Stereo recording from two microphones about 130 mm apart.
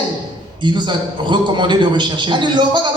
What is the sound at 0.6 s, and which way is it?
A man's voice, 35° right (ahead or behind).